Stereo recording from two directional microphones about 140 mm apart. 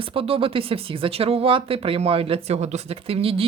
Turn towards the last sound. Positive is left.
turn(degrees=-45)  # may be behind; listen again after turning